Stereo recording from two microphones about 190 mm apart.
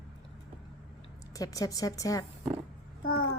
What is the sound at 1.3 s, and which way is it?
Speech, 20° left (ahead or behind).